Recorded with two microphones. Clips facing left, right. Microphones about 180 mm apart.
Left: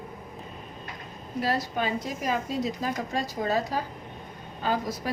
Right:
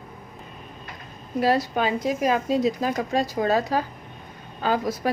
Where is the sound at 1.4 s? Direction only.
85° right.